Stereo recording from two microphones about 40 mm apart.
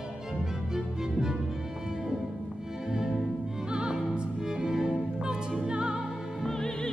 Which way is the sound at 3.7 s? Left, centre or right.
Right.